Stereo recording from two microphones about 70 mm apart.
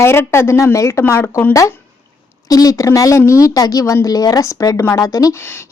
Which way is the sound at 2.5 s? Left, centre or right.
Left.